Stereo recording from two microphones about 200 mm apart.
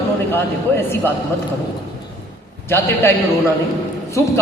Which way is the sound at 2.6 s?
10° left (ahead or behind).